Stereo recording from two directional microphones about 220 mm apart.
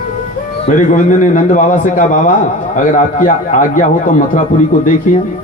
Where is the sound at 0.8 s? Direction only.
35° left (ahead or behind).